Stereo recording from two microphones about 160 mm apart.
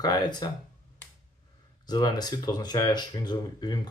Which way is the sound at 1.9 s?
25° left (ahead or behind).